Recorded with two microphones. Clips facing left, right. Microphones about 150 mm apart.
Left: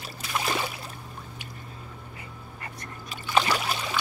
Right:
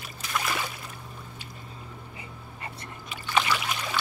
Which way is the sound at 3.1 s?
40° left (ahead or behind).